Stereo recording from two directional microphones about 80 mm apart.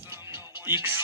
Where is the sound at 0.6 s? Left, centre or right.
Right.